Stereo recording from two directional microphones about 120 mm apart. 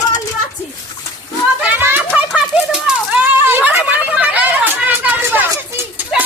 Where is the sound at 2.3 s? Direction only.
5° right (ahead or behind).